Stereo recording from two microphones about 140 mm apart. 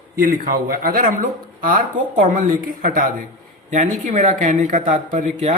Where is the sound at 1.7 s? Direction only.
65° right (ahead or behind); by 3.1 s 80° right.